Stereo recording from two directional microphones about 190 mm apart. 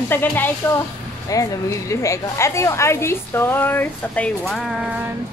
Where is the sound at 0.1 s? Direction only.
10° left (ahead or behind).